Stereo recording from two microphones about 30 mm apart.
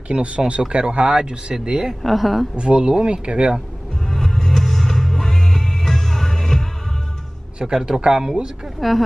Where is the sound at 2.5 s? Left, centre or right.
Right.